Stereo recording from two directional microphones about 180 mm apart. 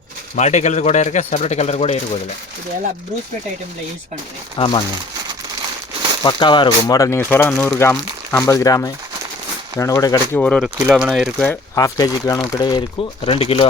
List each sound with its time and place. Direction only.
0.3 s a man's voice: 40° left (ahead or behind)
4.5 s speech: 25° left (ahead or behind)
6.2 s speech: 25° left (ahead or behind)
10.4 s speech: 5° left (ahead or behind)
10.8 s speech: 10° right (ahead or behind)
11.7 s speech: 20° left (ahead or behind)